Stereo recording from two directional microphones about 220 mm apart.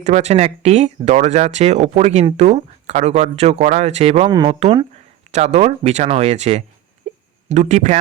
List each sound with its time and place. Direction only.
0.0 s speech: 30° right (ahead or behind)
4.3 s speech: 20° right (ahead or behind)
7.1 s a sound: 30° right (ahead or behind)
7.4 s speech: 30° right (ahead or behind)